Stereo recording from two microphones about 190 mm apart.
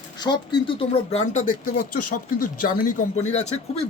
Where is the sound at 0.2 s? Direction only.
25° left (ahead or behind).